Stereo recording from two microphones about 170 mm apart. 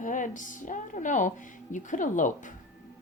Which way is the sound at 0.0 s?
50° left (ahead or behind).